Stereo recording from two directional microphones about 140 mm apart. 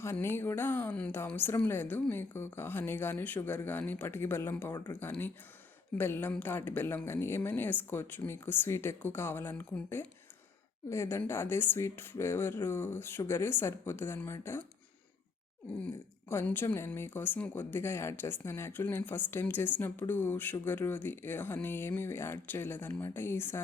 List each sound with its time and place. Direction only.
0.0 s speech: 20° left (ahead or behind)
4.7 s a woman's voice: 25° left (ahead or behind)
4.9 s a woman's voice: 15° left (ahead or behind)
16.3 s speech: 15° left (ahead or behind)